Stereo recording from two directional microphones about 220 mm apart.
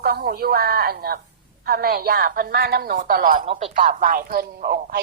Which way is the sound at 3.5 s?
25° right (ahead or behind).